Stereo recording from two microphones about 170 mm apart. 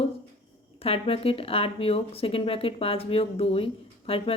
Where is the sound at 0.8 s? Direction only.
35° left (ahead or behind).